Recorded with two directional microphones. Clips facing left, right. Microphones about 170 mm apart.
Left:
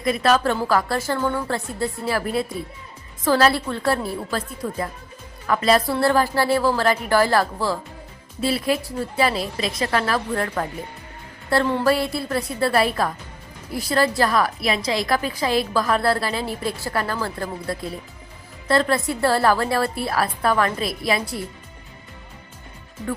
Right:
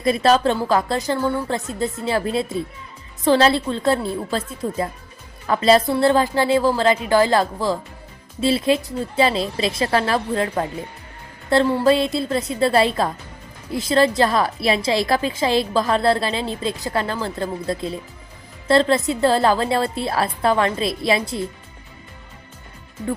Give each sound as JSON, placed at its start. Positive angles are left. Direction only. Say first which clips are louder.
{"t": 0.0, "sound": "a woman's voice", "louder": "right 3 dB", "side_deg": -30}
{"t": 11.6, "sound": "a woman's voice", "louder": "right 3 dB", "side_deg": -15}